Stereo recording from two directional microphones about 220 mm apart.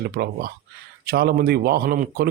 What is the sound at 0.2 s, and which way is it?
Speech, 45° right (ahead or behind).